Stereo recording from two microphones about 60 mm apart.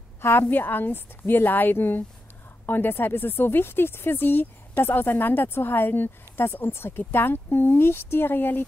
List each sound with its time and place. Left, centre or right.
0.2 s speech: left